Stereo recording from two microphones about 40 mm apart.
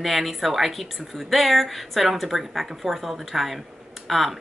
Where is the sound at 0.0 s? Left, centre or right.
Centre.